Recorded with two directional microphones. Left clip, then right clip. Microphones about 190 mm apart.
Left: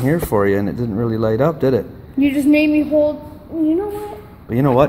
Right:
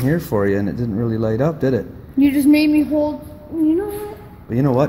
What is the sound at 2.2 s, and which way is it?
Speech, 55° right (ahead or behind).